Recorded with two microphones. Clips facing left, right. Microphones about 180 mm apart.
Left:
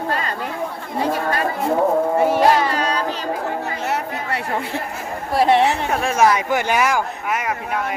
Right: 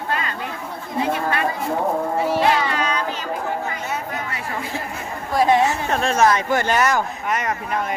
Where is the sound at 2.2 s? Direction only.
50° left (ahead or behind); by 3.0 s 35° left (ahead or behind).